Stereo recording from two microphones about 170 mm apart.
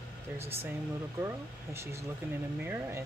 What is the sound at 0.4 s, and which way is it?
Speech, 15° right (ahead or behind).